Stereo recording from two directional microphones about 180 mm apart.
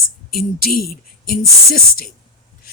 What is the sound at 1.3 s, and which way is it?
Speech, 55° left (ahead or behind).